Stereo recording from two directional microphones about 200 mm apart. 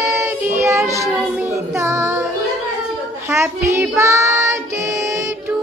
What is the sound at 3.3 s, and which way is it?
Child singing, 15° right (ahead or behind).